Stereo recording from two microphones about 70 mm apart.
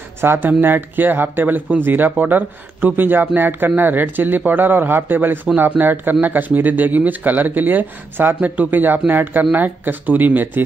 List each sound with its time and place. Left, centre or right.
0.2 s speech: right